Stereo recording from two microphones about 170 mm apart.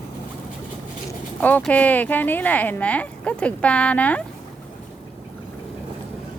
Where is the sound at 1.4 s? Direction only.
10° left (ahead or behind).